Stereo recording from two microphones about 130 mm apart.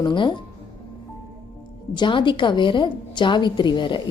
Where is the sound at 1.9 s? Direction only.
35° left (ahead or behind).